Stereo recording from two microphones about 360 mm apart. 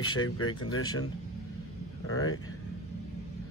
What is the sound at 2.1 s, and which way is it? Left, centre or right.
Speech, left.